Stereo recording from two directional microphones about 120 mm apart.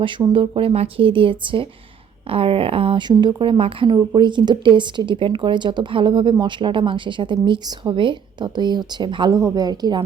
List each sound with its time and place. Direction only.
0.0 s a woman's voice: 45° right (ahead or behind)
3.1 s a woman's voice: 40° right (ahead or behind)
3.8 s a woman's voice: 35° right (ahead or behind)
9.3 s speech: 30° right (ahead or behind)